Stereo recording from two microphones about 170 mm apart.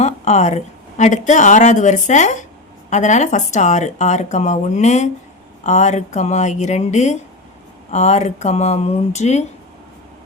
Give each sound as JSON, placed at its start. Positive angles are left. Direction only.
{"t": 0.0, "sound": "a woman's voice", "side_deg": 40}